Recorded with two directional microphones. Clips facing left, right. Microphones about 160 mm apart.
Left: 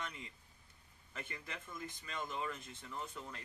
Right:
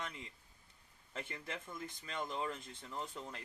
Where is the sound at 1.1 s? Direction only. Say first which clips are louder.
Right 3 dB; 25° right (ahead or behind).